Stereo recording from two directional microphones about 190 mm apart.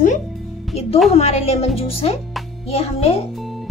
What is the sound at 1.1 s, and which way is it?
A woman's voice, 35° left (ahead or behind).